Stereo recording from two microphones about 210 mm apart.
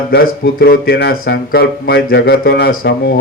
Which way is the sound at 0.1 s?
45° left (ahead or behind).